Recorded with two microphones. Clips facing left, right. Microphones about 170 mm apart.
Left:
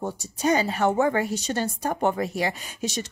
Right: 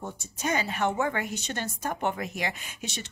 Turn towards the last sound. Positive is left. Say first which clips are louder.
# left 8 dB
turn(degrees=35)  # may be behind; listen again after turning